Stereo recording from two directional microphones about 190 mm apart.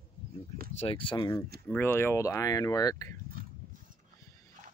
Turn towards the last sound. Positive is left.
turn(degrees=20)  # may be behind; listen again after turning